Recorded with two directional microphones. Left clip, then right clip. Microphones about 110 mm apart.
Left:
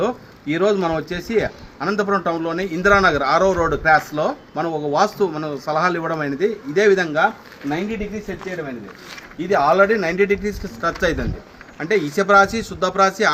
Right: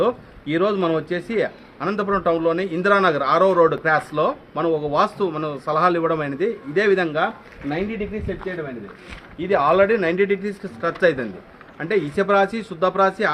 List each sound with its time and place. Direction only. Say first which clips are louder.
0.0 s a man's voice: right 1 dB; 30° right (ahead or behind)
9.5 s a man's voice: left 1 dB; 25° right (ahead or behind)